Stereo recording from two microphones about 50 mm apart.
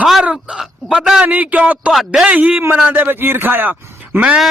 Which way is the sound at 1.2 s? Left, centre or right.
Right.